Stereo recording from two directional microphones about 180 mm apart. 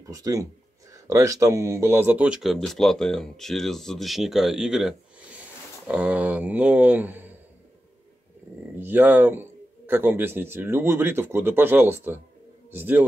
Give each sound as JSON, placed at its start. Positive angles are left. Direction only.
{"t": 0.1, "sound": "a man's voice", "side_deg": -20}
{"t": 8.7, "sound": "a man's voice", "side_deg": -10}